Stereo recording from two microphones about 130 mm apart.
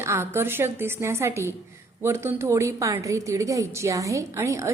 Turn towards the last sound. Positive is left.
turn(degrees=-25)  # may be behind; listen again after turning